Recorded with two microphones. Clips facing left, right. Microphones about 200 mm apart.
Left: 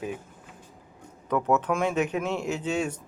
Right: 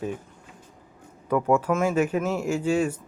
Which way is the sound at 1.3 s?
10° right (ahead or behind).